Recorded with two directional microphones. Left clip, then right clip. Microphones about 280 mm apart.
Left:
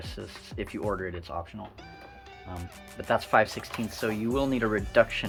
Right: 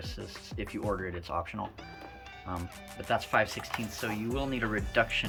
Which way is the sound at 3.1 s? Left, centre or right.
Centre.